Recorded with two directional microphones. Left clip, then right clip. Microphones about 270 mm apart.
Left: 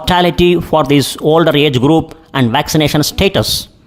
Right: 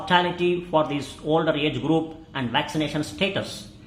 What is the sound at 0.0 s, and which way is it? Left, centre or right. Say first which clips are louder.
Speech: left 10 dB; left.